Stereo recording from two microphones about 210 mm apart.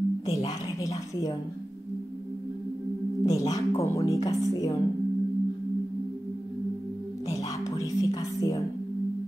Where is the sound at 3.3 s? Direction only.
15° left (ahead or behind).